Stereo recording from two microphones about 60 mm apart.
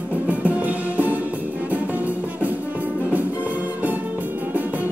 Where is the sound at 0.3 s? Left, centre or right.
Right.